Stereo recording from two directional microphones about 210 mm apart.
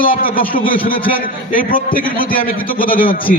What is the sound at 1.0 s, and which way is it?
A man's voice, 40° left (ahead or behind).